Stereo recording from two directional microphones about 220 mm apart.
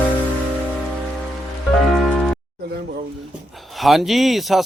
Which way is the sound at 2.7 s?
45° right (ahead or behind).